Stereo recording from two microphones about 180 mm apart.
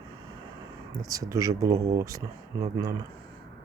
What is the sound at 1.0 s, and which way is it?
Speech, 20° right (ahead or behind).